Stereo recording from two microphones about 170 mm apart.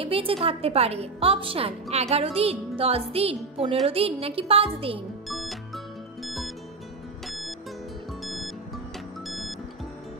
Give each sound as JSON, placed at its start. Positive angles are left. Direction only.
{"t": 0.0, "sound": "a woman's voice", "side_deg": -35}
{"t": 5.3, "sound": "music", "side_deg": 0}